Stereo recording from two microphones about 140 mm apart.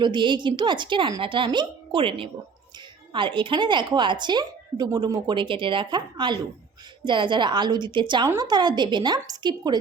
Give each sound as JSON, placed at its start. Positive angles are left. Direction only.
{"t": 0.0, "sound": "a woman's voice", "side_deg": -35}